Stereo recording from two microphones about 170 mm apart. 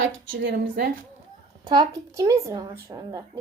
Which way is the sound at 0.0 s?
90° right.